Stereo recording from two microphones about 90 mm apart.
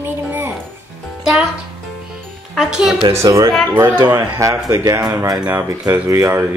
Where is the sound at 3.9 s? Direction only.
55° right (ahead or behind).